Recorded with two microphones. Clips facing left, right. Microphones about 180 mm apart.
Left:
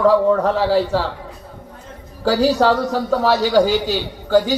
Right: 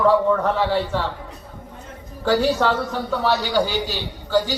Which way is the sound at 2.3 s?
35° left (ahead or behind).